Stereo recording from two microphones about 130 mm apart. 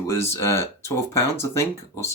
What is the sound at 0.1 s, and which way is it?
Speech, 20° left (ahead or behind).